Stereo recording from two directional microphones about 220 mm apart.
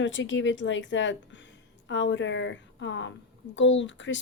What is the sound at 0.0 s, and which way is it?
A woman's voice, 55° left (ahead or behind).